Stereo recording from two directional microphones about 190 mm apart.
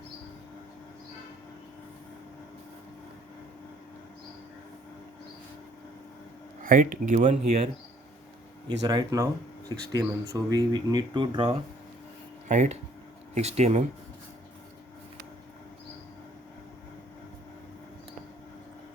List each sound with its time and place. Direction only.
6.6 s speech: 45° right (ahead or behind)
8.8 s speech: 20° right (ahead or behind)
12.5 s speech: 40° right (ahead or behind)